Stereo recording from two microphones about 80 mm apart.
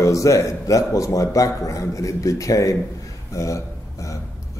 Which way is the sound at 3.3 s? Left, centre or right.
Left.